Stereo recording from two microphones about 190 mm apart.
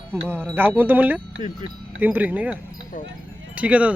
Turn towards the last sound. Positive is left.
turn(degrees=-5)  # may be behind; listen again after turning